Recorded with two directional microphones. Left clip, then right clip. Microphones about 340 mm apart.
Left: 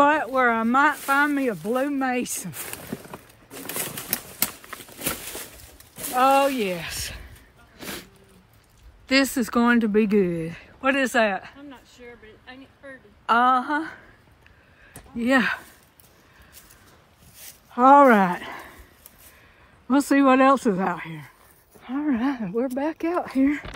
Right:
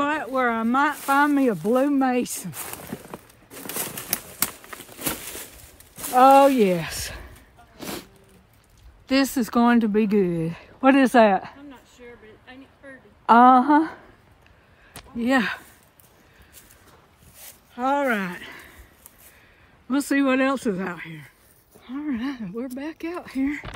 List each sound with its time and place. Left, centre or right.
0.0 s speech: centre
6.1 s speech: centre
7.7 s a sound: centre
9.0 s speech: centre
11.7 s a sound: centre
13.2 s a woman's voice: centre
15.1 s speech: centre
17.7 s speech: centre
19.9 s speech: centre
21.9 s speech: centre